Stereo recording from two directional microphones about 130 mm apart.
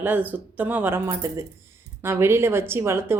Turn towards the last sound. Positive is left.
turn(degrees=-20)  # may be behind; listen again after turning